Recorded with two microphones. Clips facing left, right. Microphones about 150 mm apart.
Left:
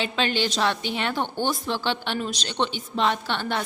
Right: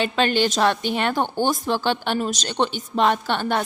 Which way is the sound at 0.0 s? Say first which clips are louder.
Right 5 dB; 50° right (ahead or behind).